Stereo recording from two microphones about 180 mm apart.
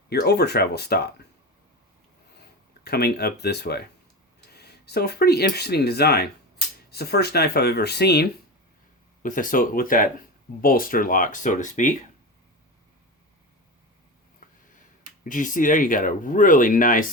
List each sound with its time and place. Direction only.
0.1 s speech: 65° left (ahead or behind)
2.8 s speech: 60° left (ahead or behind)
9.2 s speech: 50° left (ahead or behind)
15.2 s speech: 45° left (ahead or behind)